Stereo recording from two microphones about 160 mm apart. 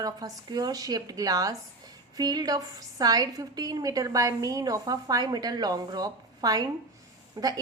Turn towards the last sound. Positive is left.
turn(degrees=-25)  # may be behind; listen again after turning